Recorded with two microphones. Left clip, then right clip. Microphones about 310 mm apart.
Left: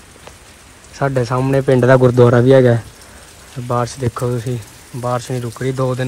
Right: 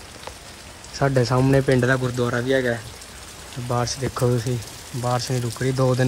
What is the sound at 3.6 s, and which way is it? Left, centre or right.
Speech, centre.